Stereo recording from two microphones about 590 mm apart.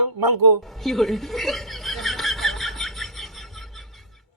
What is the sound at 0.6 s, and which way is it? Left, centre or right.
Snicker, centre.